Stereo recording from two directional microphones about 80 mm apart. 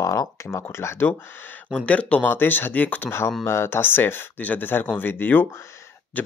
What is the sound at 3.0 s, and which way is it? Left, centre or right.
Speech, left.